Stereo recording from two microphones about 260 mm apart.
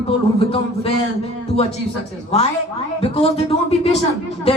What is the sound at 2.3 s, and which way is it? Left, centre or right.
Speech, left.